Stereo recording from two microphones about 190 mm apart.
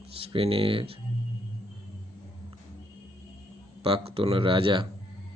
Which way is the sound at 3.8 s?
30° right (ahead or behind).